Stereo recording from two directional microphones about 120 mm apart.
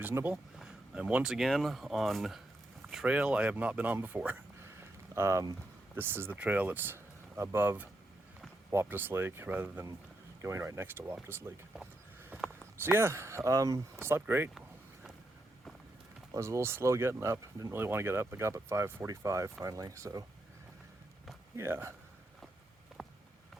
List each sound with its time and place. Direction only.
0.0 s speech: 15° right (ahead or behind)
12.3 s a sound: 15° right (ahead or behind)
12.8 s speech: 20° right (ahead or behind)
16.3 s speech: 25° right (ahead or behind)
21.5 s speech: 20° right (ahead or behind)
23.0 s a sound: 5° right (ahead or behind)